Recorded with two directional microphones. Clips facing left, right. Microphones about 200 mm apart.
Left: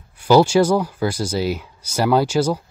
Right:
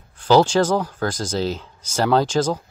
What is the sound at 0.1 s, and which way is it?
Speech, 10° left (ahead or behind).